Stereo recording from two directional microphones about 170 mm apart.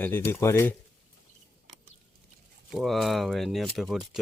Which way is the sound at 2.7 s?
Centre (ahead or behind).